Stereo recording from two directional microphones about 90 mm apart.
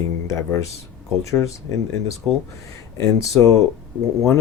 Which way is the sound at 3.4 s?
25° left (ahead or behind).